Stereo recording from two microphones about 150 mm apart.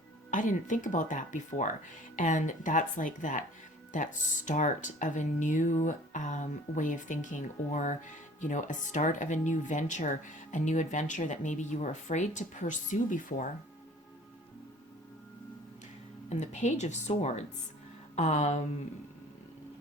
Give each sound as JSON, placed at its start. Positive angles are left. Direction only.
{"t": 0.3, "sound": "speech", "side_deg": 60}
{"t": 16.3, "sound": "a woman's voice", "side_deg": 50}